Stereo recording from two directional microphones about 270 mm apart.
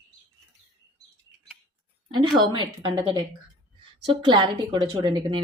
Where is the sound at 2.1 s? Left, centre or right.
Centre.